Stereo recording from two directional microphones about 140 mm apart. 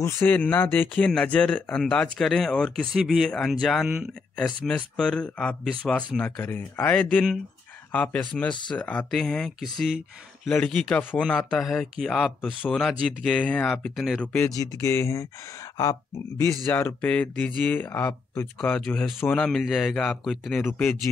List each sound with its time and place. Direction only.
0.0 s speech: 15° left (ahead or behind); by 10.5 s 5° right (ahead or behind)
10.5 s speech: 10° left (ahead or behind)
14.5 s speech: 25° left (ahead or behind); by 20.6 s centre (ahead or behind)
20.6 s speech: 15° left (ahead or behind)